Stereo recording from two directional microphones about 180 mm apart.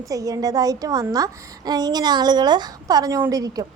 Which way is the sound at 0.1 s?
20° right (ahead or behind).